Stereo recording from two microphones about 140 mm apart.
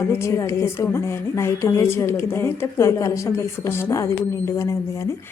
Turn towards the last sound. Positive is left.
turn(degrees=20)  # may be behind; listen again after turning